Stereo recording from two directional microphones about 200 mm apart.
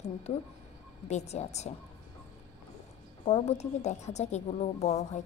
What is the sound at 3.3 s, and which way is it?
Speech, 30° left (ahead or behind).